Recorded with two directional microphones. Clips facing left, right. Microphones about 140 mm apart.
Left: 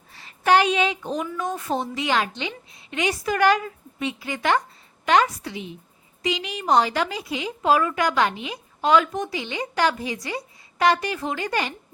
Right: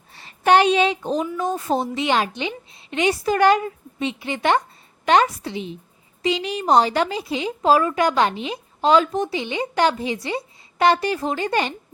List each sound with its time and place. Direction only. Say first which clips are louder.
0.1 s a woman's voice: right 3 dB; 25° right (ahead or behind)